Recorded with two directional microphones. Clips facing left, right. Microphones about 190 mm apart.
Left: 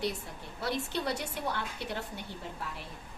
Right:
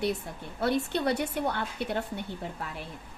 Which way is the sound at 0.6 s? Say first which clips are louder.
Right 6 dB; 60° right (ahead or behind).